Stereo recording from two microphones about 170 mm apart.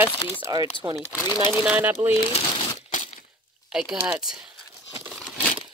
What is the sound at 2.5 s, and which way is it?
Crumpling, 25° left (ahead or behind).